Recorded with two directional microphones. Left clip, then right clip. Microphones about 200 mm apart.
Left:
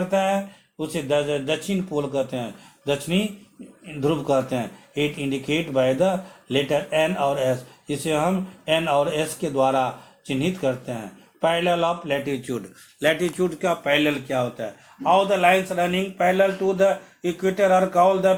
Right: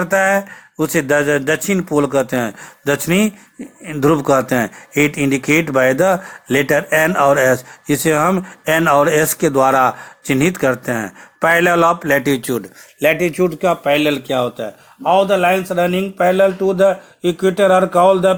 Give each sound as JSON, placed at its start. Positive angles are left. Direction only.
{"t": 0.1, "sound": "a man's voice", "side_deg": -40}
{"t": 13.6, "sound": "speech", "side_deg": -45}